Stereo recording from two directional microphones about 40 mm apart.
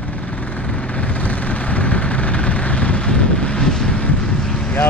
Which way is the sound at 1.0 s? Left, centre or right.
Left.